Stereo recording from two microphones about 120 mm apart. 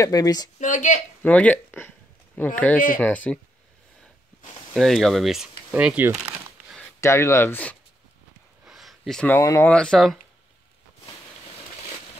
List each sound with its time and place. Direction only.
0.0 s speech: 30° left (ahead or behind)
0.6 s speech: 90° left
1.2 s speech: 10° left (ahead or behind)
4.7 s speech: centre (ahead or behind)
7.0 s speech: 25° left (ahead or behind)
8.6 s a sound: centre (ahead or behind)
9.4 s speech: 25° left (ahead or behind)
9.7 s speech: 5° left (ahead or behind)